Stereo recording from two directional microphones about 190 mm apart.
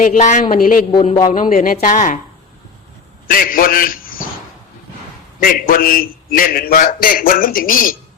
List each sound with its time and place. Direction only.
0.0 s a man's voice: 40° left (ahead or behind)
3.2 s a man's voice: 50° left (ahead or behind)
5.4 s a man's voice: 50° left (ahead or behind)